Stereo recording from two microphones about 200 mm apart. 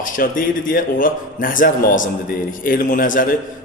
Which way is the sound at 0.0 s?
45° left (ahead or behind).